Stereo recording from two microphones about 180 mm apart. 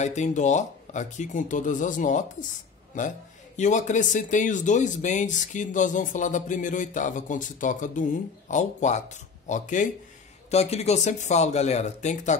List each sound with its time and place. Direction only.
0.0 s speech: 40° left (ahead or behind)
3.5 s speech: 40° left (ahead or behind)